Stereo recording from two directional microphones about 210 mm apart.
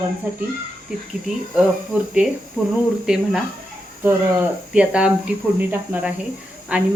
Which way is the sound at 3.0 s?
5° right (ahead or behind).